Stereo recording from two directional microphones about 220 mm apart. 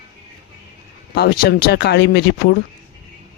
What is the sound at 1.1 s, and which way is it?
Speech, 45° left (ahead or behind).